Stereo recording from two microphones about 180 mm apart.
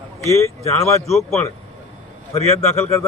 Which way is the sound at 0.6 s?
35° left (ahead or behind).